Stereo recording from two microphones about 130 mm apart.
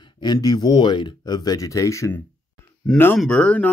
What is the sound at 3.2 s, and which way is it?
Speech, 5° left (ahead or behind).